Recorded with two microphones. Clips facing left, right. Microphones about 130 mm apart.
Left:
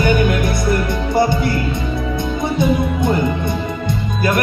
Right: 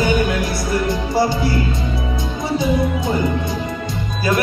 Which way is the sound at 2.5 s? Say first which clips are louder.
Even; 55° left (ahead or behind).